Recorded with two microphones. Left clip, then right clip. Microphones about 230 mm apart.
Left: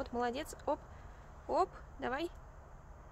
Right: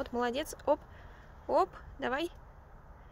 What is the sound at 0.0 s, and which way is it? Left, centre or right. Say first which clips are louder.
Speech: right 4 dB; centre.